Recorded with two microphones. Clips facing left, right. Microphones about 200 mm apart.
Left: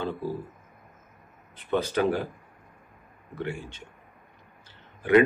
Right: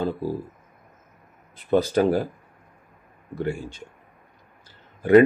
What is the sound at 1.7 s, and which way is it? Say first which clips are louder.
Speech: right 5 dB; 35° right (ahead or behind).